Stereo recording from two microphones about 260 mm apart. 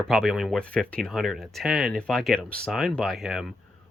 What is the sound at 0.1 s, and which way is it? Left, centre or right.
Speech, centre.